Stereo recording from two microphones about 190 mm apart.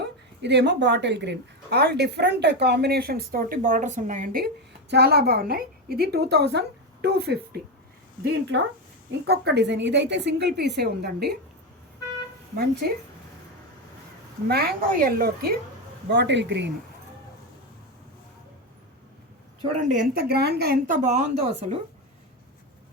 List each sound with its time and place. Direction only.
0.4 s speech: 65° right (ahead or behind); by 4.4 s 45° right (ahead or behind)
4.9 s speech: 60° right (ahead or behind)
14.4 s speech: 55° right (ahead or behind)
16.0 s speech: 65° right (ahead or behind)
19.6 s speech: 40° right (ahead or behind)